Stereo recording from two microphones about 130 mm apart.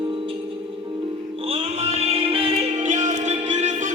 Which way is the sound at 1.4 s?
50° right (ahead or behind).